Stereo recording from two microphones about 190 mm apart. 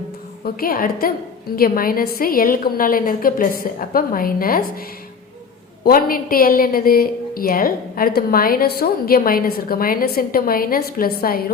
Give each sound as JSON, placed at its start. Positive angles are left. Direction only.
{"t": 0.4, "sound": "a woman's voice", "side_deg": 50}